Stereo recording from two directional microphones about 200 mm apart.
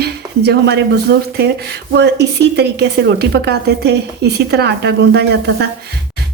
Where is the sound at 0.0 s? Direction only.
55° right (ahead or behind).